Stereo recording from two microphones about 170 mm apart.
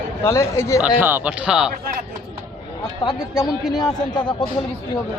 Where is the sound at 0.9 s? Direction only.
10° right (ahead or behind).